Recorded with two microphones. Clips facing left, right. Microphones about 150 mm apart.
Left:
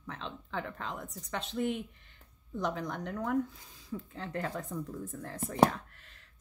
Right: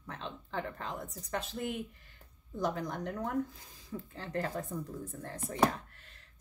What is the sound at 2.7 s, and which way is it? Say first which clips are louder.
A woman's voice: right 1 dB; 35° right (ahead or behind).